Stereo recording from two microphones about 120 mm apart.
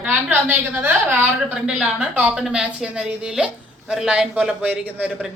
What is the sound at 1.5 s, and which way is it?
Speech, 5° right (ahead or behind).